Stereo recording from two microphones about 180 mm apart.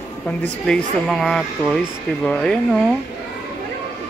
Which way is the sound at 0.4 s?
5° left (ahead or behind).